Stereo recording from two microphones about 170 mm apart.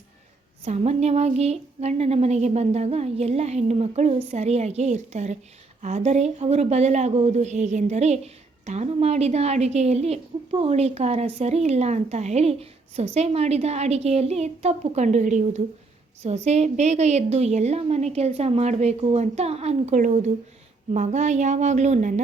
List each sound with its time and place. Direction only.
0.6 s a woman's voice: 40° right (ahead or behind)